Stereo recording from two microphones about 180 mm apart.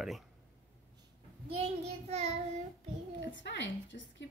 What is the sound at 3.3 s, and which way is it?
Speech, 75° left (ahead or behind).